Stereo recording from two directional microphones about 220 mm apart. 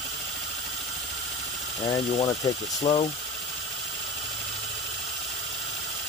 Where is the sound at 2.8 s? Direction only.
25° left (ahead or behind).